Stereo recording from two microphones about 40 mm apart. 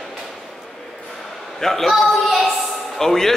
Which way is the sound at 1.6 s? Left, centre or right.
Centre.